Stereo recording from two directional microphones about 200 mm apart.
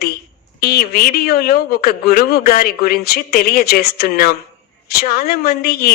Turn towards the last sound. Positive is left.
turn(degrees=50)  # may be behind; listen again after turning